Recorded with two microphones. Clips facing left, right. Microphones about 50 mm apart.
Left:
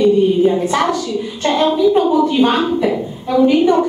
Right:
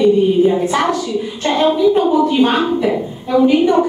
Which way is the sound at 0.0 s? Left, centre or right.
Centre.